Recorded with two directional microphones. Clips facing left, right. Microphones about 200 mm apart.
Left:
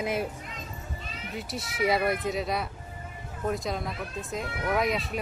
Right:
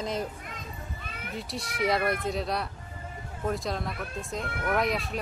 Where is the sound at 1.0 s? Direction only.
55° right (ahead or behind).